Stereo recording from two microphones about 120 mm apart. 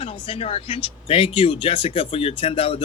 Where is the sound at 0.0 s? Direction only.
50° left (ahead or behind).